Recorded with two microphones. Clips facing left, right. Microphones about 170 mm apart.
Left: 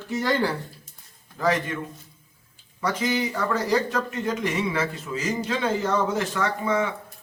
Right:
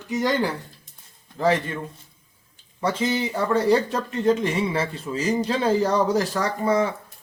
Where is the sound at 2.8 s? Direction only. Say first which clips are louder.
Right 2 dB; 30° right (ahead or behind).